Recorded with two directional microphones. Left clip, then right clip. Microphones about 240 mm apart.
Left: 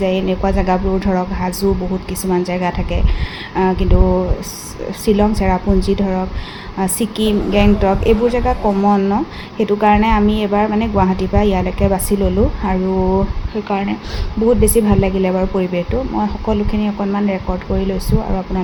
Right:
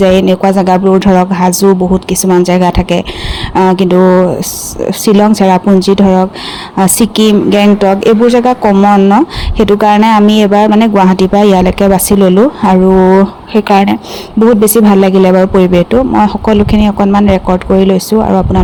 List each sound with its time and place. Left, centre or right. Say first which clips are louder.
0.0 s speech: right 10 dB; right